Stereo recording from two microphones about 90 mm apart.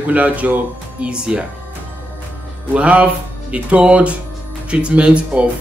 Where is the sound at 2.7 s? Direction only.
15° right (ahead or behind).